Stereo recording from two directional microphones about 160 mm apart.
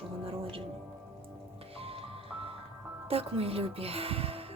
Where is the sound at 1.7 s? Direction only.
35° right (ahead or behind).